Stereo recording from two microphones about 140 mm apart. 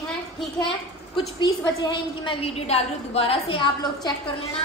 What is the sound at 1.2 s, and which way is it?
A woman's voice, 30° left (ahead or behind).